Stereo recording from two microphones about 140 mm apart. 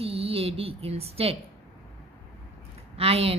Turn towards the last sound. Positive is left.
turn(degrees=-45)  # may be behind; listen again after turning